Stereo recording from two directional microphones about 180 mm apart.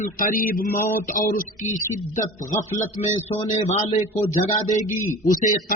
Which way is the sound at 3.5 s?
40° left (ahead or behind).